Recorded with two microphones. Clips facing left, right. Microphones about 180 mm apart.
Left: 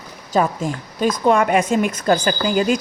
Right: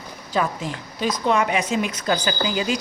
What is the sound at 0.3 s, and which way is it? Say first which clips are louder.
A woman's voice: left 5 dB; 45° left (ahead or behind).